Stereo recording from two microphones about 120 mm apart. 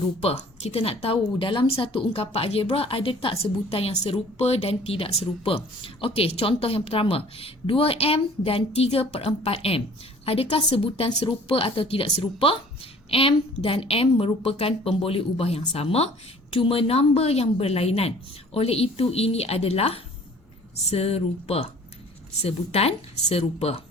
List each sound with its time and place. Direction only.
0.2 s a woman's voice: 55° left (ahead or behind)